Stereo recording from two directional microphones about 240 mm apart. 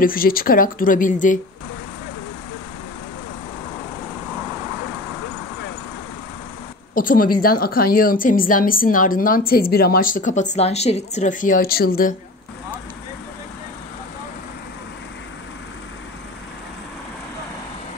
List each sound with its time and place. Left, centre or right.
0.0 s a woman's voice: left
7.0 s a woman's voice: left